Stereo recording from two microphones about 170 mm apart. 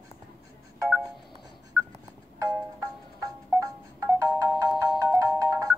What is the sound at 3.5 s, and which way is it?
Music, centre (ahead or behind).